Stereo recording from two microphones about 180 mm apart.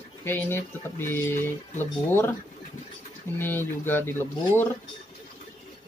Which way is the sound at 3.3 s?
10° left (ahead or behind).